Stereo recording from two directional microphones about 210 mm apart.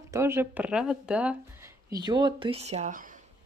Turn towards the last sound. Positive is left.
turn(degrees=-35)  # may be behind; listen again after turning